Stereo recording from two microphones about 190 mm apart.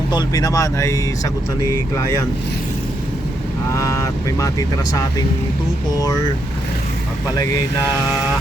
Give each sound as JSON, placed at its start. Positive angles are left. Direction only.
{"t": 0.1, "sound": "speech", "side_deg": 20}
{"t": 3.8, "sound": "speech", "side_deg": 15}